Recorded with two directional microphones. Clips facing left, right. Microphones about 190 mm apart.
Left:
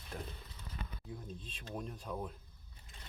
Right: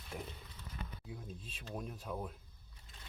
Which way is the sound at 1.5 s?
5° right (ahead or behind).